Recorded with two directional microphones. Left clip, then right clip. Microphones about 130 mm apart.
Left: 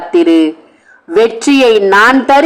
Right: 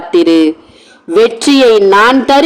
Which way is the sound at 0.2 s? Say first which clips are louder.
Even; 25° right (ahead or behind).